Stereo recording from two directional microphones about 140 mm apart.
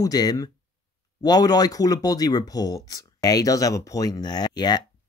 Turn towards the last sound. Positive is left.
turn(degrees=30)  # may be behind; listen again after turning